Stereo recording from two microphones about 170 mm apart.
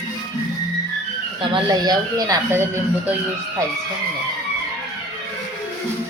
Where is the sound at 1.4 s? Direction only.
25° right (ahead or behind).